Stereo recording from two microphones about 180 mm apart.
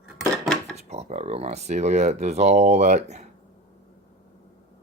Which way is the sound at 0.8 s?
35° right (ahead or behind).